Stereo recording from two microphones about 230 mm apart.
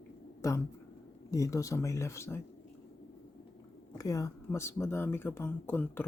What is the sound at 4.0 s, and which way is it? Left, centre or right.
Speech, centre.